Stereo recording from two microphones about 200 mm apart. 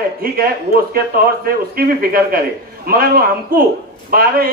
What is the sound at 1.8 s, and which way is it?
A man's voice, 50° right (ahead or behind).